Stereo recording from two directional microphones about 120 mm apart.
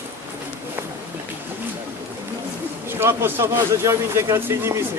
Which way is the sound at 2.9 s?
20° right (ahead or behind).